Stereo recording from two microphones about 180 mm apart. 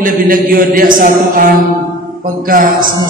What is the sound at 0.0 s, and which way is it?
Mantra, 50° right (ahead or behind).